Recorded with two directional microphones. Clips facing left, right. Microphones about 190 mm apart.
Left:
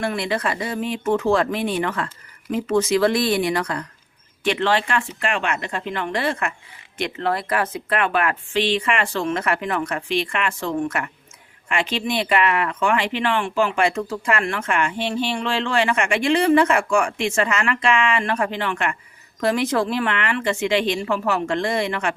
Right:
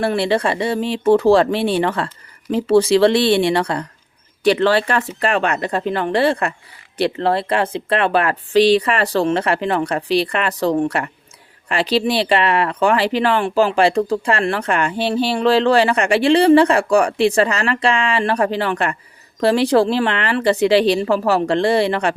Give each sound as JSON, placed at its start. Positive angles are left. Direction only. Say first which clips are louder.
{"t": 0.0, "sound": "speech", "louder": "right 6 dB", "side_deg": -35}